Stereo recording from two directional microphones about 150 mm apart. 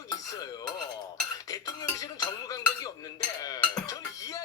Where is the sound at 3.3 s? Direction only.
25° left (ahead or behind).